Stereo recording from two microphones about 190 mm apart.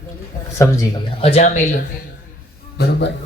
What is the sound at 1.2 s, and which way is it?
Speech, 35° left (ahead or behind).